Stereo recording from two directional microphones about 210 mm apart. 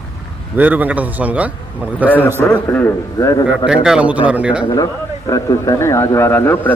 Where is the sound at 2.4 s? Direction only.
5° left (ahead or behind).